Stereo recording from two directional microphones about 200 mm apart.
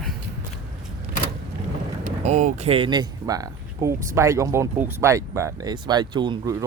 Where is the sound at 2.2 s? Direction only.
35° right (ahead or behind).